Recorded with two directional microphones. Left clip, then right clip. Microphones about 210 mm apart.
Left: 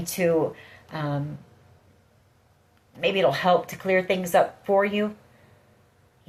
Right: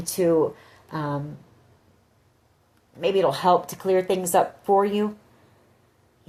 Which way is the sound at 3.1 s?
45° right (ahead or behind).